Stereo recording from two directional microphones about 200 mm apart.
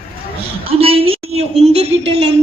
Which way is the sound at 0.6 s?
30° right (ahead or behind).